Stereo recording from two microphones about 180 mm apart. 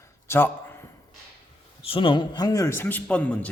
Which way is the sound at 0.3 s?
10° left (ahead or behind).